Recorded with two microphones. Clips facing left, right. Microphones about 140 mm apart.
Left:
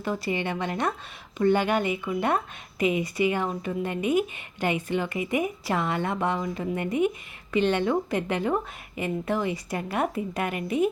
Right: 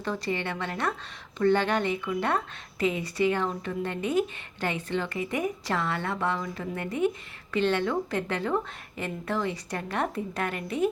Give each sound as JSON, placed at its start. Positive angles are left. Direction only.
{"t": 0.0, "sound": "speech", "side_deg": 10}